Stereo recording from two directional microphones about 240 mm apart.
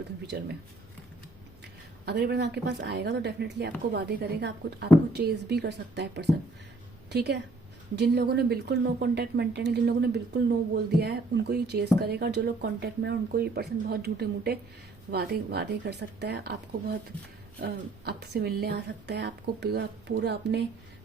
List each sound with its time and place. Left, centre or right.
0.3 s a woman's voice: right
1.6 s a woman's voice: right